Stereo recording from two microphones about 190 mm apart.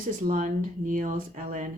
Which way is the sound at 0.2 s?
45° right (ahead or behind).